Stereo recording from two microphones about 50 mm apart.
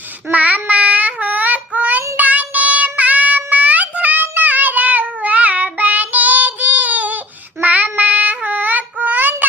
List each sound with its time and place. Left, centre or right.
0.3 s child singing: right